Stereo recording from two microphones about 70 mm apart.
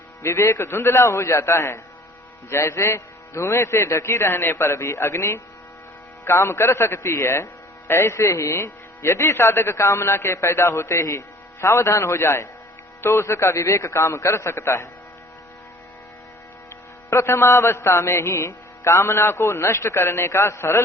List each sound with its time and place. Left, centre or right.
0.2 s music: left
6.2 s a man's voice: left
7.9 s music: left
17.2 s music: left